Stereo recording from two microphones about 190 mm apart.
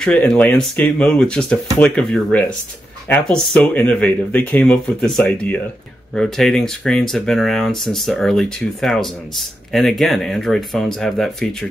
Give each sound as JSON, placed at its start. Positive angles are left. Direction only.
{"t": 0.0, "sound": "speech", "side_deg": 5}